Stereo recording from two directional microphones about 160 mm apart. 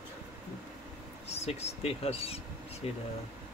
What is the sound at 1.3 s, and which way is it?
Speech, 40° left (ahead or behind).